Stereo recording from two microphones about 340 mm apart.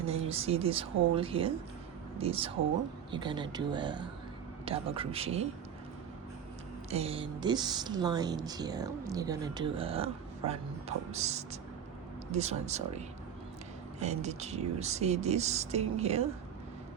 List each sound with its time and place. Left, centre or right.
0.3 s a woman's voice: centre
6.9 s a woman's voice: centre
14.0 s speech: centre